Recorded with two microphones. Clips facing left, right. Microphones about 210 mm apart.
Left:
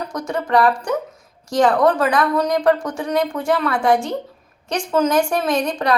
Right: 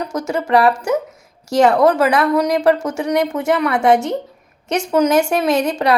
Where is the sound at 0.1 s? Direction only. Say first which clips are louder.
Right 3 dB; 25° right (ahead or behind).